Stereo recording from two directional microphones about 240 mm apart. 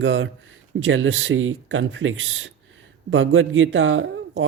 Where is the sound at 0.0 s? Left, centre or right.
Right.